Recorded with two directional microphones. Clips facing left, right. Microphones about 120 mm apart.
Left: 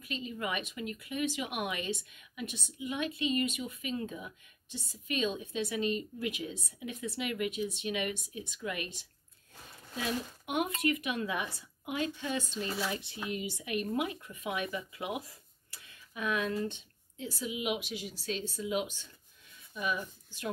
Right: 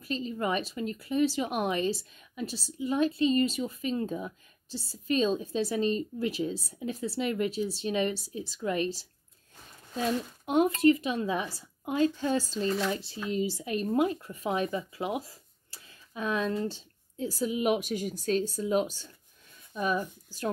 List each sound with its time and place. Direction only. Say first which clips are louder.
0.0 s speech: right 6 dB; 35° right (ahead or behind)
10.4 s speech: right 10 dB; 30° right (ahead or behind)